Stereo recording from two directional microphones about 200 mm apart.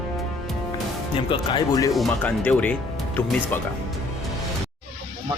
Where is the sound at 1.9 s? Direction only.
5° left (ahead or behind).